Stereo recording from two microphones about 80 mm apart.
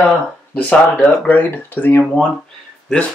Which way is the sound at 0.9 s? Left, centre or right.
Centre.